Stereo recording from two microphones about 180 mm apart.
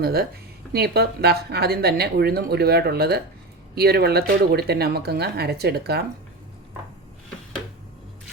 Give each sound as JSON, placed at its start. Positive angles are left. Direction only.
{"t": 0.0, "sound": "speech", "side_deg": -60}